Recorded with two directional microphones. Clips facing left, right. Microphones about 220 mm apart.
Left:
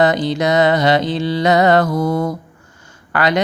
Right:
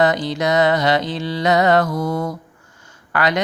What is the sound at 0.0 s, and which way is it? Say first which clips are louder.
Speech: left 3 dB; 25° left (ahead or behind).